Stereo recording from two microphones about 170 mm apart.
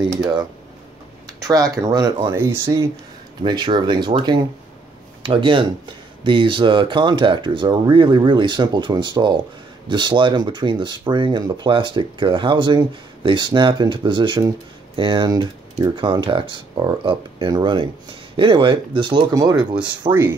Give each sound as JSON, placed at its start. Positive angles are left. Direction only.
{"t": 1.5, "sound": "speech", "side_deg": -20}
{"t": 2.3, "sound": "speech", "side_deg": -15}
{"t": 3.4, "sound": "speech", "side_deg": -25}
{"t": 20.1, "sound": "speech", "side_deg": -10}